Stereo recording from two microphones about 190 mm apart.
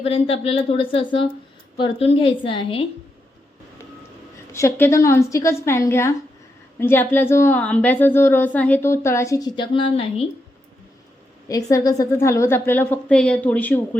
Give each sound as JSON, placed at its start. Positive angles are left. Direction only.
{"t": 0.0, "sound": "a woman's voice", "side_deg": 30}
{"t": 4.5, "sound": "a woman's voice", "side_deg": 15}
{"t": 11.4, "sound": "a woman's voice", "side_deg": 20}